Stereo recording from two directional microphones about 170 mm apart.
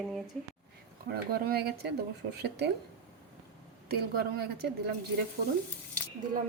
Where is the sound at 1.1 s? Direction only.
65° right (ahead or behind).